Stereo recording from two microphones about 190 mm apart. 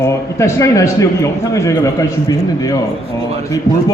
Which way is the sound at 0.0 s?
15° left (ahead or behind).